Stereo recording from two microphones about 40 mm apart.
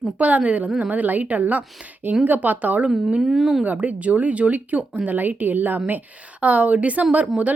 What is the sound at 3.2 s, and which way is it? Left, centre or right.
Speech, centre.